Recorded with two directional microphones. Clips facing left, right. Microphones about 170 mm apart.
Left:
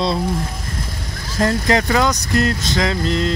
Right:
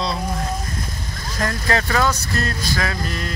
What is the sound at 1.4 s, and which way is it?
Speech, 20° left (ahead or behind).